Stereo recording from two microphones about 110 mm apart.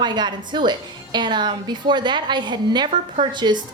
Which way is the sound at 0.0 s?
40° right (ahead or behind).